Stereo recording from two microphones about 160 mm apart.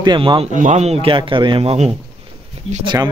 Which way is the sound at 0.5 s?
50° right (ahead or behind).